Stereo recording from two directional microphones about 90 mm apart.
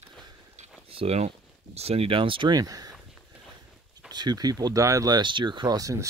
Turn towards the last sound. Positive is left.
turn(degrees=-35)  # may be behind; listen again after turning